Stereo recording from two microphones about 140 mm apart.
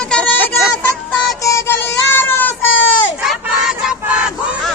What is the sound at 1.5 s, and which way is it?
Child singing, 20° left (ahead or behind).